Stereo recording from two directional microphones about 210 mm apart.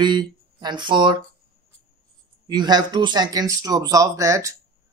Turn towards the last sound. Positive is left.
turn(degrees=-15)  # may be behind; listen again after turning